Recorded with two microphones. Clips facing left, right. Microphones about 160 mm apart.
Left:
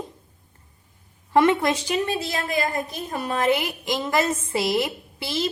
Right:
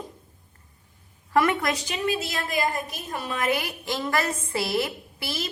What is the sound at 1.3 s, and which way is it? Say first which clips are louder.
Speech: left 4 dB; 25° left (ahead or behind).